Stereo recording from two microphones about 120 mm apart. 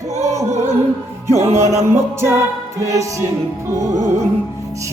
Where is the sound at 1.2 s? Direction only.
20° right (ahead or behind).